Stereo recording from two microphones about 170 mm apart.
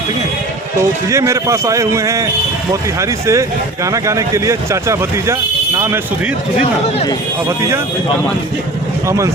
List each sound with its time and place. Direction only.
0.8 s speech: 15° right (ahead or behind)
9.0 s speech: 20° right (ahead or behind)